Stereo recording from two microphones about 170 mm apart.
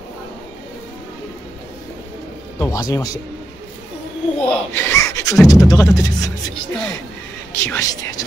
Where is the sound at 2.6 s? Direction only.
20° left (ahead or behind).